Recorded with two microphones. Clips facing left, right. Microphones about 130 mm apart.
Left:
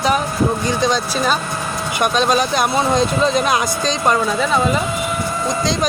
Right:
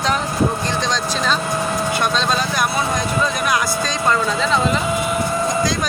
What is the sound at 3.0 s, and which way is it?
Speech, 25° left (ahead or behind).